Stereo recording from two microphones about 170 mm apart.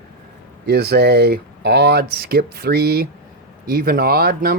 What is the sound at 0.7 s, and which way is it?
Speech, 70° right (ahead or behind).